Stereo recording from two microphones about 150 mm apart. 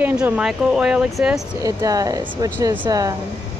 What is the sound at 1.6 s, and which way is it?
Speech, 25° right (ahead or behind).